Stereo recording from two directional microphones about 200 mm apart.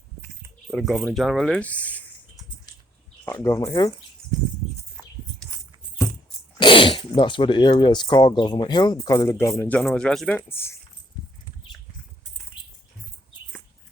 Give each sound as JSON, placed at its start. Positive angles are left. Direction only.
{"t": 0.7, "sound": "speech", "side_deg": 0}
{"t": 3.2, "sound": "speech", "side_deg": 15}
{"t": 6.6, "sound": "speech", "side_deg": 25}
{"t": 12.6, "sound": "bird", "side_deg": 25}